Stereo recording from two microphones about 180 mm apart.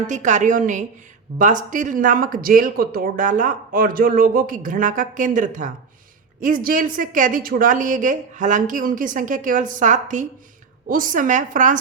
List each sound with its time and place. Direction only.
0.1 s speech: 45° right (ahead or behind)